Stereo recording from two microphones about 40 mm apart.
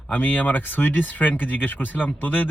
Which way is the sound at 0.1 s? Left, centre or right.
Left.